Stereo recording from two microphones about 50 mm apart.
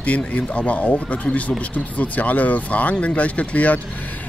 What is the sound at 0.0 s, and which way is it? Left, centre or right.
Speech, left.